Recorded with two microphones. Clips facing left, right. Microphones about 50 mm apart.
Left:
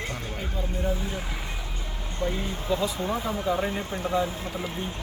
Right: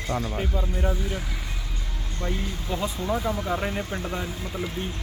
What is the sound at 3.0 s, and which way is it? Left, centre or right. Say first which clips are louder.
Speech: right 1 dB; left.